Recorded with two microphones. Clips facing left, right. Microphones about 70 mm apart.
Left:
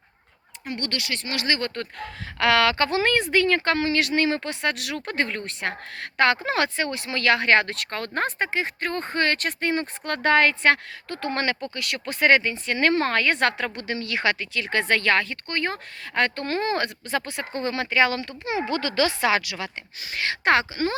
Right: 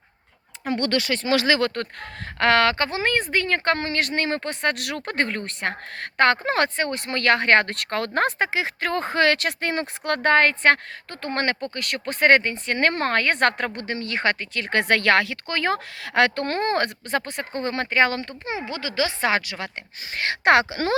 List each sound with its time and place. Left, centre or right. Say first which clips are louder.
1.5 s speech: right 5 dB; right
2.4 s speech: right 1 dB; right
10.2 s speech: right 1 dB; right
18.7 s speech: left 2 dB; centre
19.2 s a woman's voice: even; right
20.1 s speech: right 3 dB; right